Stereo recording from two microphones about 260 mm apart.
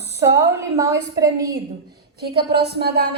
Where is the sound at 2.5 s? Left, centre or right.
Right.